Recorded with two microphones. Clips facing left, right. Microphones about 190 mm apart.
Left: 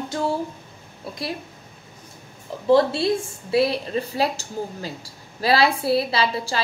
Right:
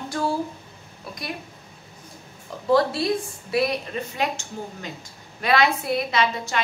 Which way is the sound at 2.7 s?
25° left (ahead or behind).